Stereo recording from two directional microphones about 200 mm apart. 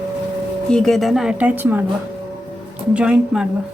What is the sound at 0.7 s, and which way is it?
Speech, 5° left (ahead or behind).